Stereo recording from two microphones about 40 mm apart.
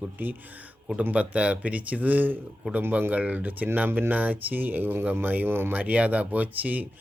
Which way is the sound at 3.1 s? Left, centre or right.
Right.